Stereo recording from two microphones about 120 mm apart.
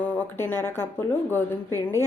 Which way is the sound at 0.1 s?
15° left (ahead or behind).